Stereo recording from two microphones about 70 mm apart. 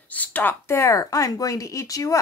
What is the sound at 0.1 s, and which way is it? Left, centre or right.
Speech, left.